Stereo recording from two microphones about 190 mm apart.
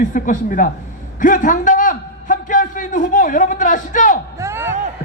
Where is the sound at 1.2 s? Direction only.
45° left (ahead or behind).